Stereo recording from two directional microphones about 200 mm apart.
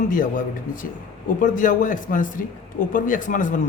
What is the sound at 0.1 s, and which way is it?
A man's voice, 45° left (ahead or behind).